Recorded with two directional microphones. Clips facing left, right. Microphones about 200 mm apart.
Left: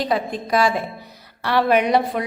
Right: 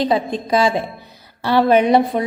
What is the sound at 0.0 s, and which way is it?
A woman's voice, 25° right (ahead or behind).